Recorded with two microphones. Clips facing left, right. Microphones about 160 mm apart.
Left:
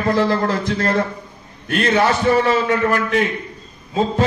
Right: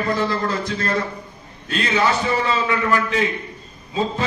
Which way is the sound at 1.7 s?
55° left (ahead or behind).